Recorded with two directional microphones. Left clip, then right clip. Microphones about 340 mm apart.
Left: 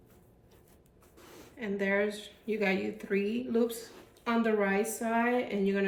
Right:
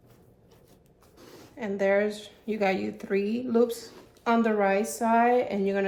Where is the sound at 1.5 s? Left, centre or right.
Centre.